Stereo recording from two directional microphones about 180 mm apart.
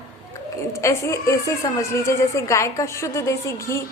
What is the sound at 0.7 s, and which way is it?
A woman's voice, 15° left (ahead or behind).